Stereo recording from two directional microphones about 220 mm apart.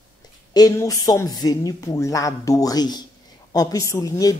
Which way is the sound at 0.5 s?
15° left (ahead or behind).